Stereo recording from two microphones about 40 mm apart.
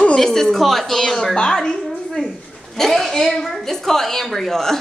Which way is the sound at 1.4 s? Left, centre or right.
Centre.